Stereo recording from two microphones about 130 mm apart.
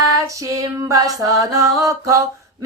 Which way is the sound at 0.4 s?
25° right (ahead or behind).